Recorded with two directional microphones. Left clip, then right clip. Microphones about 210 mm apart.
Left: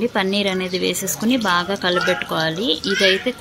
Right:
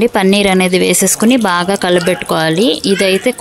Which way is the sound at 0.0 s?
40° right (ahead or behind).